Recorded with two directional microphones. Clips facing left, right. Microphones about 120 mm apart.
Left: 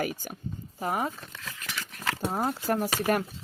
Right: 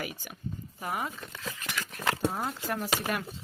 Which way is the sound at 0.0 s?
40° left (ahead or behind).